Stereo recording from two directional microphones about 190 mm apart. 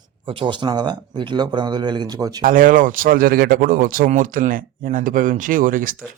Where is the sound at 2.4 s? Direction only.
45° right (ahead or behind).